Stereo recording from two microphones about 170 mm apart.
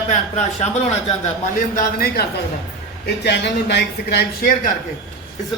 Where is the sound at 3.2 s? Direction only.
80° left.